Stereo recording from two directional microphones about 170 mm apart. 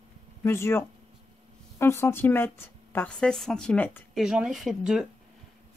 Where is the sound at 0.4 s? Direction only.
15° left (ahead or behind).